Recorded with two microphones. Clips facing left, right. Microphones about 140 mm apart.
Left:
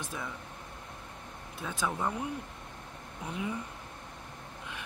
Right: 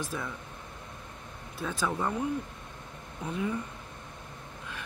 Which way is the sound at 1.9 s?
5° left (ahead or behind).